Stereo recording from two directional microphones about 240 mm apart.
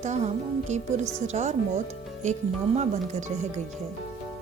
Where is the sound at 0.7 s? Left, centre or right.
Right.